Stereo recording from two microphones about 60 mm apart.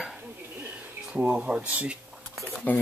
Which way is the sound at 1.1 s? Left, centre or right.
Right.